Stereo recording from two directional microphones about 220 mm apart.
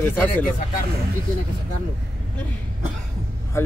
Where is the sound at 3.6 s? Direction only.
10° left (ahead or behind).